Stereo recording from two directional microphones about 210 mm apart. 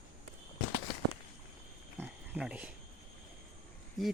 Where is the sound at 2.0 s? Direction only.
5° right (ahead or behind).